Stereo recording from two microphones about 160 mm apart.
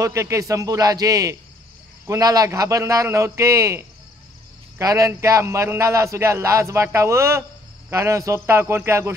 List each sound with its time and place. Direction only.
0.0 s a man's voice: 20° right (ahead or behind)